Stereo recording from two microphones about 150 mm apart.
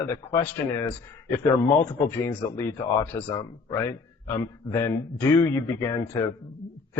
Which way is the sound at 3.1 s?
30° left (ahead or behind).